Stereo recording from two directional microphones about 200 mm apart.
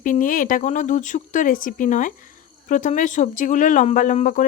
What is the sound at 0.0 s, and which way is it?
Speech, 40° left (ahead or behind).